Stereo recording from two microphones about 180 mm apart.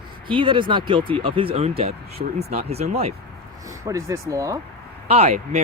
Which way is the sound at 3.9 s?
15° right (ahead or behind).